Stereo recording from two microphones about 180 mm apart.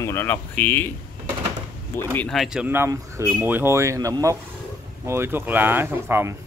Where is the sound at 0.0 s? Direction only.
15° left (ahead or behind).